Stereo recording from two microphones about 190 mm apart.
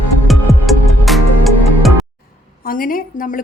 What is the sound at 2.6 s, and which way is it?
Speech, 50° left (ahead or behind).